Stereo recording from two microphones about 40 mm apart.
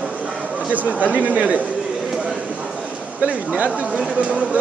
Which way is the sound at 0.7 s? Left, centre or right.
Right.